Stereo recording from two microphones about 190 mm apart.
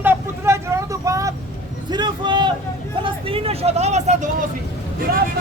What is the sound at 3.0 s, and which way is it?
Speech, 30° right (ahead or behind).